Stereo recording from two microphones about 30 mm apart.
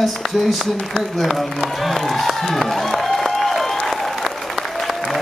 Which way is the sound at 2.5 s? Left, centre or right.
Centre.